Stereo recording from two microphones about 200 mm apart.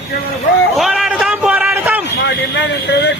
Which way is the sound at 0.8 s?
Centre (ahead or behind).